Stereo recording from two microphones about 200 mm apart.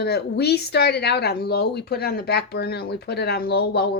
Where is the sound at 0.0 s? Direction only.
55° left (ahead or behind).